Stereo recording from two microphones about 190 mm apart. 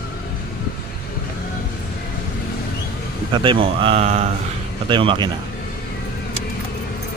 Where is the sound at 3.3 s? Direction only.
25° right (ahead or behind).